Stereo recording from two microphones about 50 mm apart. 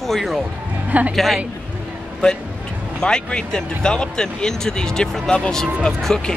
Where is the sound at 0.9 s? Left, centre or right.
Right.